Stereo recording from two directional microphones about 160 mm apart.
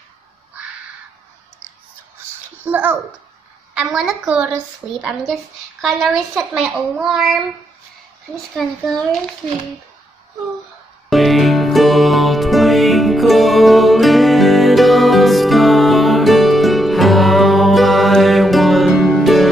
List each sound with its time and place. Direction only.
2.6 s a child's voice: 10° right (ahead or behind)
8.5 s a woman's voice: centre (ahead or behind)
11.1 s music: centre (ahead or behind)